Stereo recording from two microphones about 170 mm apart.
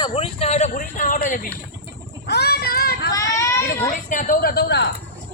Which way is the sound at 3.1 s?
20° left (ahead or behind).